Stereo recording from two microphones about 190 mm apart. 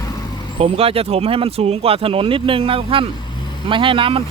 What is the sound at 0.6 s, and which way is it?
Speech, 30° right (ahead or behind).